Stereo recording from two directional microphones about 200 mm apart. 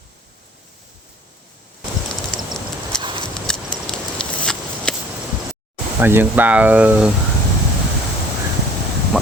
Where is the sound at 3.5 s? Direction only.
5° left (ahead or behind).